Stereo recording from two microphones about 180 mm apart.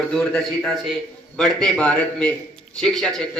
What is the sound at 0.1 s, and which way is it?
A man's voice, 5° left (ahead or behind).